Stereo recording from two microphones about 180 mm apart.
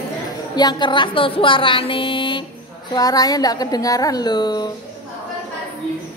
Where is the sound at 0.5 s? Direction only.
25° left (ahead or behind).